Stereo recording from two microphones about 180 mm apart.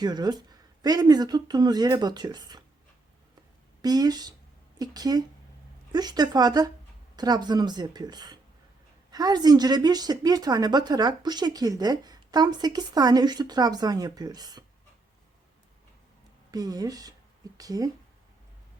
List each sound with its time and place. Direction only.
0.0 s a woman's voice: 20° right (ahead or behind)
3.8 s a woman's voice: 20° right (ahead or behind)
16.5 s a woman's voice: 20° right (ahead or behind)